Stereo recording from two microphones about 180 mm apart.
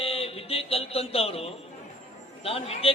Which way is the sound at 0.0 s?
35° left (ahead or behind).